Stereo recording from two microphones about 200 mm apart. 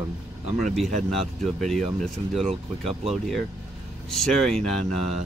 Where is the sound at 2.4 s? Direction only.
30° right (ahead or behind).